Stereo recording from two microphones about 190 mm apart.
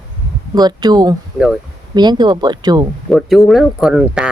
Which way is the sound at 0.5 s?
20° right (ahead or behind).